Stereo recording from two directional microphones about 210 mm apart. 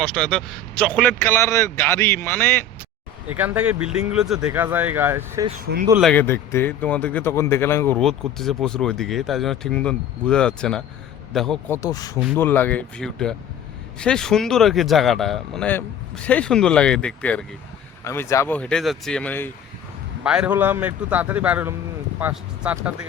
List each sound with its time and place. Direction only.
0.0 s speech: 5° left (ahead or behind)
3.3 s a man's voice: 10° right (ahead or behind)
6.0 s speech: 5° left (ahead or behind)
11.8 s speech: 15° left (ahead or behind)
20.2 s a man's voice: 5° right (ahead or behind)